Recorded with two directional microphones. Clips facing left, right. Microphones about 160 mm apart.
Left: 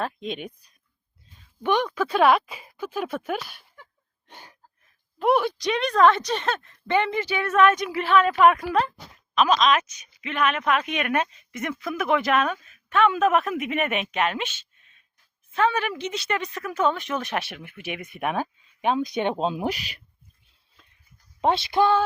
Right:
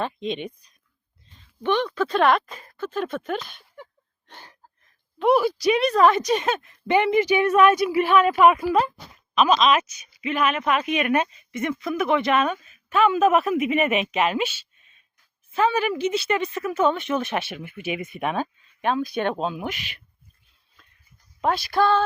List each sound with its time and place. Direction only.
0.0 s speech: centre (ahead or behind)
4.3 s a sound: 10° left (ahead or behind)
5.2 s speech: centre (ahead or behind)
18.8 s speech: 15° left (ahead or behind); by 20.0 s 35° left (ahead or behind)
21.4 s speech: 25° left (ahead or behind)